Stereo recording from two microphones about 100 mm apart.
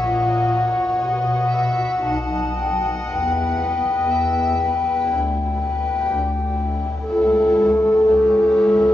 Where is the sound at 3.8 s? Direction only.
10° left (ahead or behind).